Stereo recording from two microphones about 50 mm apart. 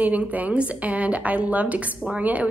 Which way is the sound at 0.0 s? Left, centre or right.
Right.